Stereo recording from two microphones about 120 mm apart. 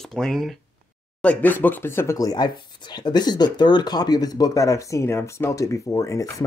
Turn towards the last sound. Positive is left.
turn(degrees=25)  # may be behind; listen again after turning